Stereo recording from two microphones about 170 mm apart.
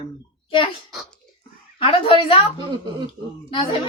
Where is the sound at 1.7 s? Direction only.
30° left (ahead or behind).